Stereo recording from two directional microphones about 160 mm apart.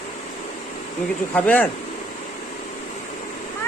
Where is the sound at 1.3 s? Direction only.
10° left (ahead or behind).